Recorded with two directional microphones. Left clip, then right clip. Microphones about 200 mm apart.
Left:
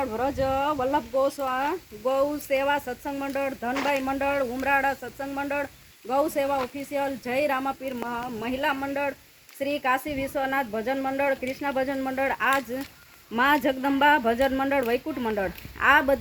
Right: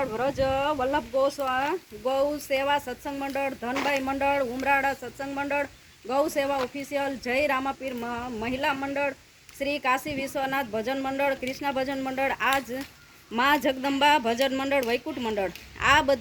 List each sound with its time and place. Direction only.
0.0 s speech: 50° left (ahead or behind); by 16.0 s 30° left (ahead or behind)